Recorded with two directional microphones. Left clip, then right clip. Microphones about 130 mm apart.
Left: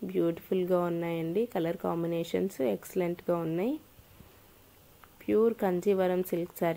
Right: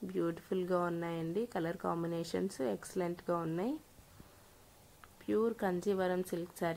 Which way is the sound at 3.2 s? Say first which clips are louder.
Left 6 dB; 10° left (ahead or behind).